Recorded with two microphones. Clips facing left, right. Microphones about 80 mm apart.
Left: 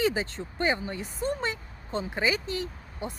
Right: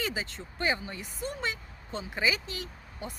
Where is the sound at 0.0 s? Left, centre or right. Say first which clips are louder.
Left 7 dB; left.